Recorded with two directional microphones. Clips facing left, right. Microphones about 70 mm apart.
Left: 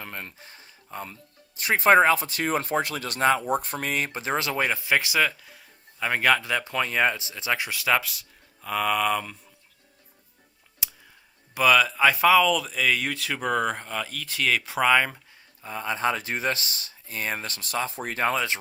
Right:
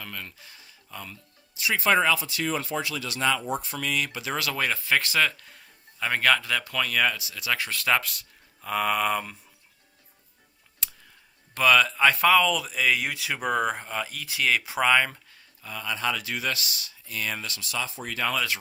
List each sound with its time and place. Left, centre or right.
0.0 s speech: left
7.7 s speech: centre
10.8 s a sound: centre
11.5 s speech: centre
15.6 s speech: left